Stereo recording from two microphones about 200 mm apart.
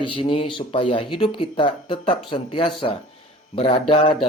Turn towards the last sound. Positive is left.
turn(degrees=25)  # may be behind; listen again after turning